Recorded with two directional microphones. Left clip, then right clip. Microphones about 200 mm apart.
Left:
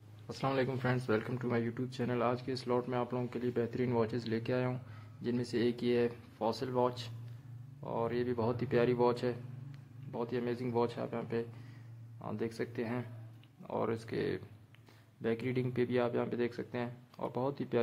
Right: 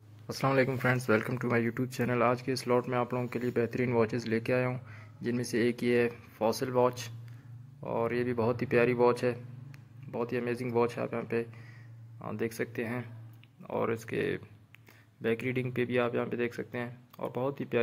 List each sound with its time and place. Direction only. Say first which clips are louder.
0.3 s speech: right 6 dB; 20° right (ahead or behind); by 17.7 s centre (ahead or behind)